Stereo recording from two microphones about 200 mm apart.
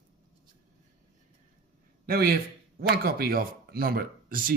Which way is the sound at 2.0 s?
50° right (ahead or behind).